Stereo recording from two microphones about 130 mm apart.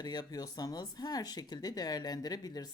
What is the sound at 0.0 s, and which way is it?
Speech, 30° left (ahead or behind).